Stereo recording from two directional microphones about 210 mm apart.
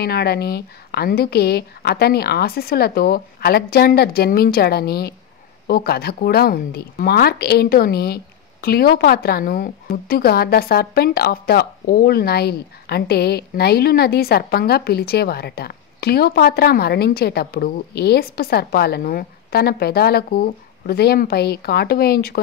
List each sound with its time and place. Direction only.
0.0 s speech: 50° left (ahead or behind)